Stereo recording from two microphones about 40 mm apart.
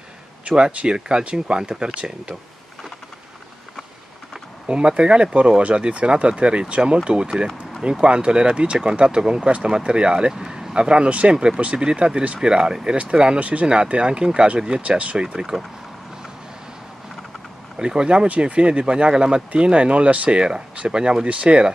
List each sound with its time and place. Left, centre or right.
0.5 s speech: right
4.6 s speech: right
8.0 s speech: right
10.3 s speech: centre; by 15.1 s right
15.1 s speech: centre
17.7 s speech: centre
21.3 s speech: right